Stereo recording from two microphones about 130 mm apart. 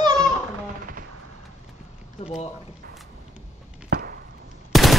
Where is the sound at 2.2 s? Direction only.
55° left (ahead or behind).